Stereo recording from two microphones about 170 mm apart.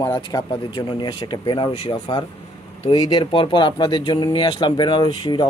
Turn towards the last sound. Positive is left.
turn(degrees=25)  # may be behind; listen again after turning